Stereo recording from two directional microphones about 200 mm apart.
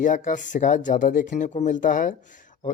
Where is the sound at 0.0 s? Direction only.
40° left (ahead or behind).